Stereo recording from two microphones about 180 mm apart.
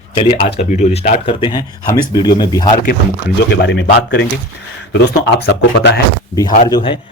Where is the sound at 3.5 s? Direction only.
75° left (ahead or behind).